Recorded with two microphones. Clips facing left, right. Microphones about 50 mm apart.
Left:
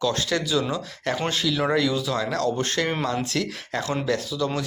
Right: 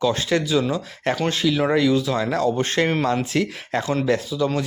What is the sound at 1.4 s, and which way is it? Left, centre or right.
Speech, centre.